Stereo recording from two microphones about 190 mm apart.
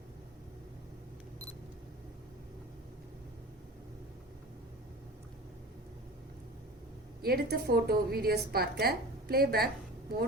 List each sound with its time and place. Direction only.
7.2 s a woman's voice: 55° right (ahead or behind)